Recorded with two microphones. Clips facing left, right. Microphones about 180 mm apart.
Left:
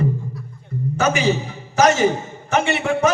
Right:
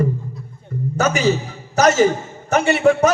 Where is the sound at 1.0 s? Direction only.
45° right (ahead or behind).